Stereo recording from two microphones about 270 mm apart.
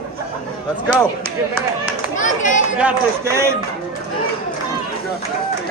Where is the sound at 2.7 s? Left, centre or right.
Centre.